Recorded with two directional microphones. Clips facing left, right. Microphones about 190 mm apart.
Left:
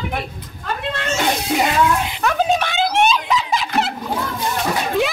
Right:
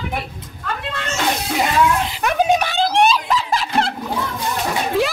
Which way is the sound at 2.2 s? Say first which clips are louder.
Right 2 dB; 15° right (ahead or behind).